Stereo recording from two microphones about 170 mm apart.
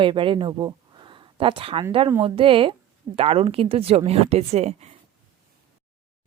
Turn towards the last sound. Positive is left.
turn(degrees=-40)  # may be behind; listen again after turning